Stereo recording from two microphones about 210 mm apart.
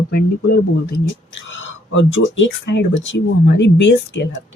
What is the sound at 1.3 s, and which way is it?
Speech, 65° left (ahead or behind).